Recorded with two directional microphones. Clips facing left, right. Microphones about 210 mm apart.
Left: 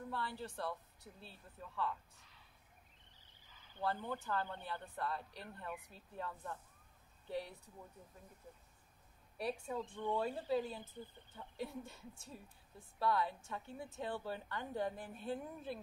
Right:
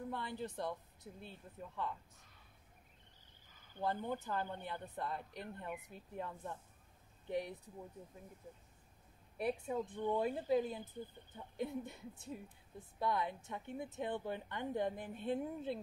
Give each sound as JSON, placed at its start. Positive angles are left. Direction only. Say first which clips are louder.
{"t": 0.1, "sound": "speech", "louder": "right 1 dB", "side_deg": -20}
{"t": 3.5, "sound": "a sound", "louder": "right 4 dB", "side_deg": -50}
{"t": 3.8, "sound": "speech", "louder": "right 2 dB", "side_deg": -20}
{"t": 9.4, "sound": "a woman's voice", "louder": "right 3 dB", "side_deg": -20}